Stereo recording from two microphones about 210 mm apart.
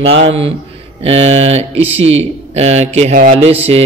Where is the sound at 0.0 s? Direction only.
25° right (ahead or behind).